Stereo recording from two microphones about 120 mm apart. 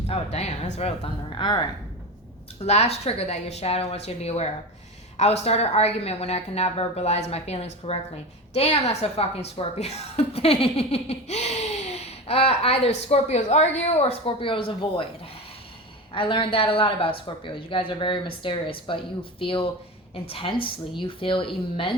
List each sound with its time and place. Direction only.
0.1 s speech: 60° left (ahead or behind); by 1.6 s 40° left (ahead or behind)
2.6 s speech: 60° left (ahead or behind)
16.1 s speech: 45° left (ahead or behind)